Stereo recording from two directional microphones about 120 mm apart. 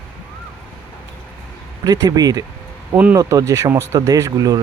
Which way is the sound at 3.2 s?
30° right (ahead or behind).